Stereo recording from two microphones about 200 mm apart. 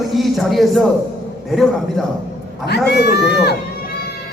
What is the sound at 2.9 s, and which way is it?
Speech, 55° left (ahead or behind).